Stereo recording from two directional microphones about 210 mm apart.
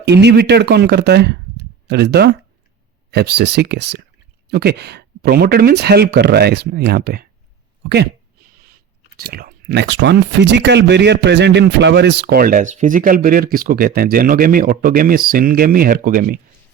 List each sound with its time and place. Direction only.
0.0 s speech: 55° right (ahead or behind)
9.1 s speech: 45° right (ahead or behind)